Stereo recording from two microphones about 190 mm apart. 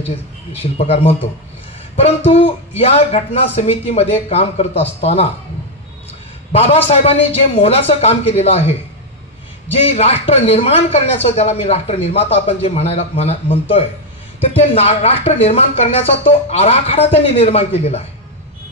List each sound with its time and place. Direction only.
0.0 s speech: 35° left (ahead or behind)
6.5 s speech: 30° left (ahead or behind)